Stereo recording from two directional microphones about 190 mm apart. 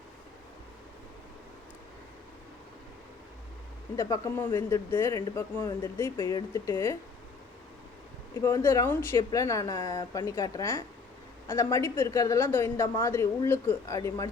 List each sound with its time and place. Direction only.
3.9 s speech: 15° left (ahead or behind)
8.4 s speech: 15° left (ahead or behind)